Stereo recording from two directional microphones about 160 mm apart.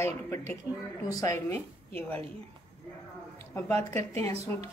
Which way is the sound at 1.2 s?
20° left (ahead or behind).